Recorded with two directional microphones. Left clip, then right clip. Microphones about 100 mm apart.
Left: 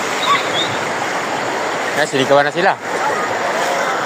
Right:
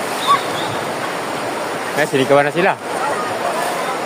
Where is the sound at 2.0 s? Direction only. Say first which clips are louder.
Even; 30° right (ahead or behind).